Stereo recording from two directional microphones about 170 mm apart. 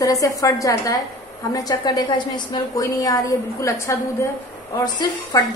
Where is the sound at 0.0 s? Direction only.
20° left (ahead or behind).